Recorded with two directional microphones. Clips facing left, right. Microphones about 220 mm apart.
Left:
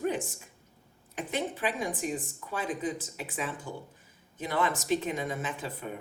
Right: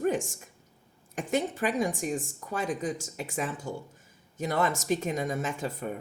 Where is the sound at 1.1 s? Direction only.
45° right (ahead or behind).